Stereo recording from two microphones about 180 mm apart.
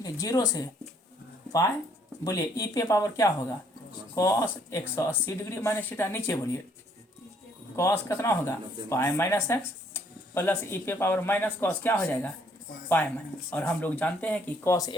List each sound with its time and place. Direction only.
0.0 s speech: 20° left (ahead or behind)
2.2 s speech: 20° left (ahead or behind)
7.8 s speech: 15° left (ahead or behind)
13.5 s speech: 5° left (ahead or behind)